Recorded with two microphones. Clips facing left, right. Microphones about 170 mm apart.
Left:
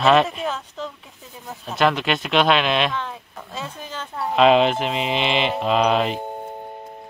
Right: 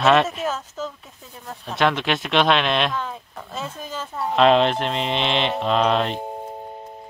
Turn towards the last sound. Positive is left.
turn(degrees=0)  # may be behind; listen again after turning